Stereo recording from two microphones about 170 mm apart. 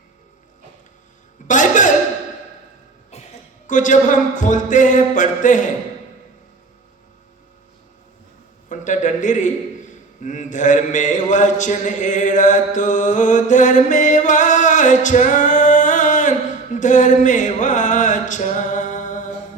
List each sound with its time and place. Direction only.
1.5 s a sound: 45° left (ahead or behind)
3.7 s speech: 50° left (ahead or behind)
8.7 s a man's voice: 45° left (ahead or behind)
17.2 s music: 45° left (ahead or behind)